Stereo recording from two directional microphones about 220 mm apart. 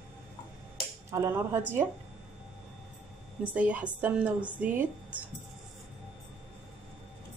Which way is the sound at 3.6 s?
5° right (ahead or behind).